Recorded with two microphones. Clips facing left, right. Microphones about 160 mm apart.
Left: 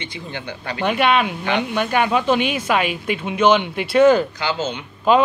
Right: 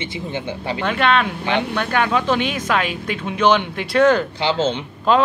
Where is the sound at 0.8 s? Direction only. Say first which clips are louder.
Left 1 dB; 10° left (ahead or behind).